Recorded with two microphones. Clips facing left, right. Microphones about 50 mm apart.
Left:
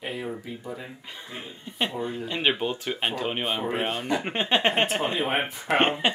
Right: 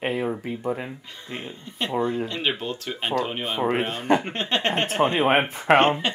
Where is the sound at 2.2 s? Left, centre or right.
Centre.